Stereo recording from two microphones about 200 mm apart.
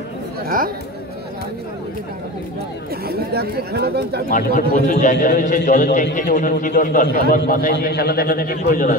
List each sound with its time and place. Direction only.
3.1 s speech: 50° right (ahead or behind)
4.3 s a man's voice: 40° left (ahead or behind)